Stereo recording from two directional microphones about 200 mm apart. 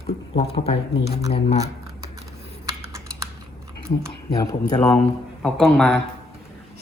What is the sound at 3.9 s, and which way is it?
Speech, 35° left (ahead or behind).